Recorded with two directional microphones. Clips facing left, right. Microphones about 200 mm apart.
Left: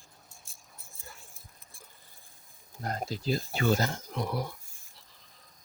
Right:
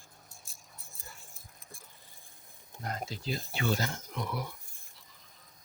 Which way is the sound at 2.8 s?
40° left (ahead or behind).